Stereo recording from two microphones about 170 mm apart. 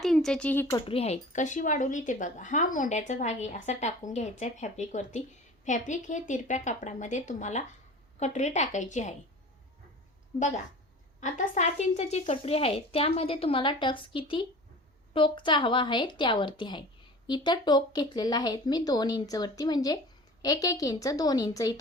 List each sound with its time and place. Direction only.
0.0 s speech: centre (ahead or behind)
0.9 s speech: 35° left (ahead or behind)
11.2 s a woman's voice: 45° left (ahead or behind); by 21.8 s 20° left (ahead or behind)